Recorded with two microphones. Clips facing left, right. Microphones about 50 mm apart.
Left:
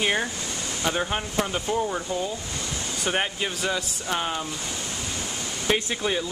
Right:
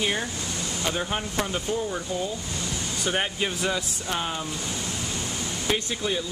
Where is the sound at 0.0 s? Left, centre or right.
Left.